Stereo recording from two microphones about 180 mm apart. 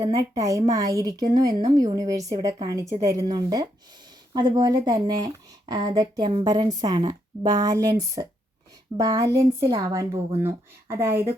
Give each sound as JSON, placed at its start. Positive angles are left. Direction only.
{"t": 0.0, "sound": "speech", "side_deg": -20}